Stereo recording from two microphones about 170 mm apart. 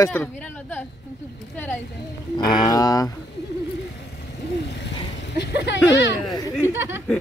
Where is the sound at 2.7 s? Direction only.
20° left (ahead or behind).